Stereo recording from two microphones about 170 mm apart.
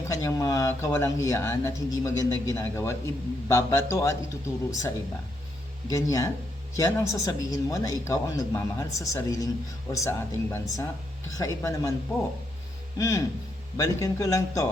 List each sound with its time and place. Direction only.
0.1 s speech: 20° left (ahead or behind)
5.9 s speech: 20° left (ahead or behind)
13.0 s speech: 20° left (ahead or behind)